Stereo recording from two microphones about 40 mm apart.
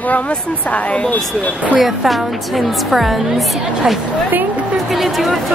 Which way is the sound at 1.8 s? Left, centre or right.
Centre.